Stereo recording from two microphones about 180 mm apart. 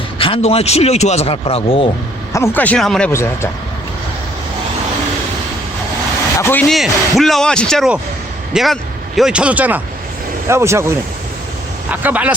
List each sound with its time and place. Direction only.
0.2 s speech: 30° left (ahead or behind)
2.3 s speech: 15° left (ahead or behind)
3.1 s speech: 15° left (ahead or behind)
6.4 s a man's voice: 10° left (ahead or behind); by 12.3 s 10° right (ahead or behind)